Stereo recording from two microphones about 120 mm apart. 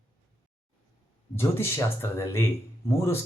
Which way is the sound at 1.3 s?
20° left (ahead or behind).